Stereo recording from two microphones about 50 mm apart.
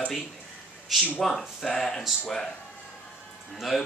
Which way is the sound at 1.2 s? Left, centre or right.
Centre.